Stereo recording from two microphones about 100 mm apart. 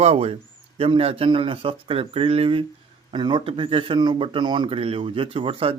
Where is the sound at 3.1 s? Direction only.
50° right (ahead or behind); by 5.7 s 70° right (ahead or behind).